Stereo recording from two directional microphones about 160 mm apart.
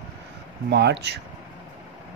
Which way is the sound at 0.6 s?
90° right.